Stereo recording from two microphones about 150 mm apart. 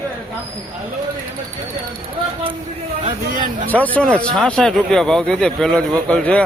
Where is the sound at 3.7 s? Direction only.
10° left (ahead or behind).